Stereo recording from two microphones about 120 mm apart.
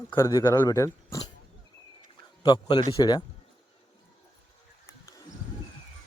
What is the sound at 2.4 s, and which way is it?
Speech, 40° left (ahead or behind).